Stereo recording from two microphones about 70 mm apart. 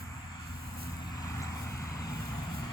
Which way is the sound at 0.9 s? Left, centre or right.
Left.